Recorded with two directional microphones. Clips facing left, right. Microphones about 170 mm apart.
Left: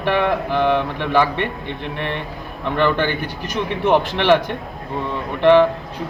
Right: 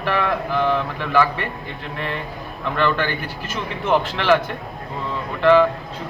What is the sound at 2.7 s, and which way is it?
A man's voice, 20° left (ahead or behind).